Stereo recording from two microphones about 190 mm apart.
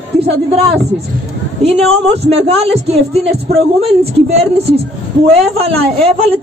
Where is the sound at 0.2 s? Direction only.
30° right (ahead or behind).